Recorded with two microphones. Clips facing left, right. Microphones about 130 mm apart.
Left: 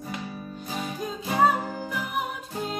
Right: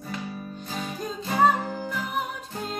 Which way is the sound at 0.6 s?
10° left (ahead or behind).